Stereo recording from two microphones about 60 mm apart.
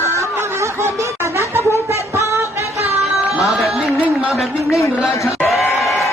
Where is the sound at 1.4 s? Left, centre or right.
Right.